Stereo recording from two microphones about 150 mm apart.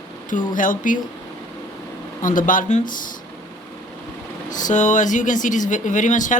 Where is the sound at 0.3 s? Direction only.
60° left (ahead or behind).